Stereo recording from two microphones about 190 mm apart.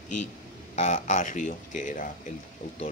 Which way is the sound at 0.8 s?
40° left (ahead or behind).